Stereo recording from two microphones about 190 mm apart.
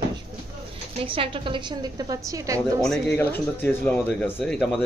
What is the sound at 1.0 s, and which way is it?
A woman's voice, 30° right (ahead or behind).